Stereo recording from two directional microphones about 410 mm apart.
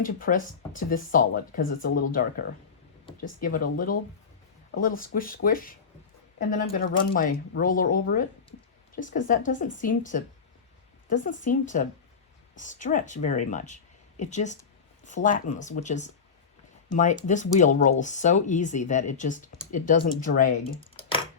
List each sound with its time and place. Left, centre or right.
0.0 s speech: centre
6.7 s speech: left